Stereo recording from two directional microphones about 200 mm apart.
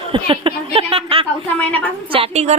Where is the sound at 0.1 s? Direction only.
25° right (ahead or behind).